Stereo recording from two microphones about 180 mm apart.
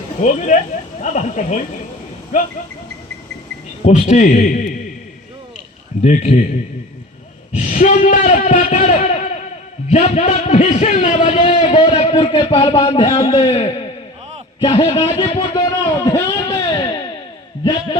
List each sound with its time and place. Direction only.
0.2 s a man's voice: 40° left (ahead or behind)
3.8 s a man's voice: 40° left (ahead or behind)
6.0 s a man's voice: 40° left (ahead or behind)
7.5 s a man's voice: 45° left (ahead or behind); by 16.0 s 25° left (ahead or behind)
16.0 s a man's voice: 15° left (ahead or behind)
16.5 s a sound: 25° left (ahead or behind)
17.6 s a man's voice: 25° left (ahead or behind)